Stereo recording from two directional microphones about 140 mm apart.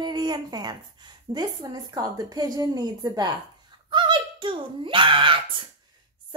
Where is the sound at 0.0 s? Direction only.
30° right (ahead or behind).